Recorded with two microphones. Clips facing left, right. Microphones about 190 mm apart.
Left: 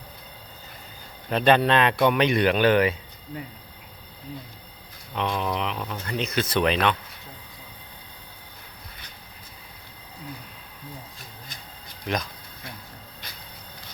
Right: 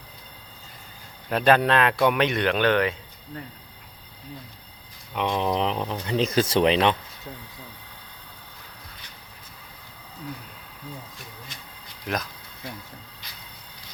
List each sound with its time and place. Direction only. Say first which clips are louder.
1.3 s speech: even; 5° right (ahead or behind)
5.1 s speech: right 3 dB; 20° right (ahead or behind)
12.0 s speech: left 1 dB; 5° right (ahead or behind)